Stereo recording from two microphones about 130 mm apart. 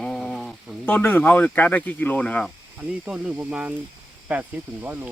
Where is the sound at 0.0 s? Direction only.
5° left (ahead or behind).